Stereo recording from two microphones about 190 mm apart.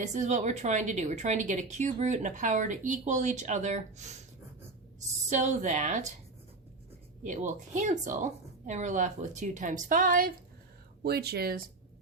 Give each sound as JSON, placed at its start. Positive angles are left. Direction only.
{"t": 0.0, "sound": "speech", "side_deg": -40}
{"t": 5.3, "sound": "speech", "side_deg": -40}
{"t": 7.2, "sound": "speech", "side_deg": -40}
{"t": 11.0, "sound": "speech", "side_deg": -55}